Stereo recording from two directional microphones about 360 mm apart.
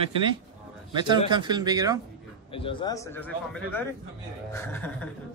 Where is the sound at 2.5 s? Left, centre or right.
Centre.